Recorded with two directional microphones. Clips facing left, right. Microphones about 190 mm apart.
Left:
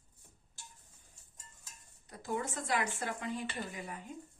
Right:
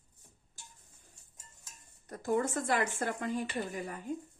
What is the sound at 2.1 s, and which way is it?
Speech, 50° right (ahead or behind).